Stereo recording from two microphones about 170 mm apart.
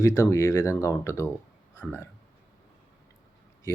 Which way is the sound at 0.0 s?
20° left (ahead or behind).